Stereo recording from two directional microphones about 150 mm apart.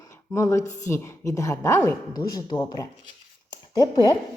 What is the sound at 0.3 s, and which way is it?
Speech, 20° left (ahead or behind).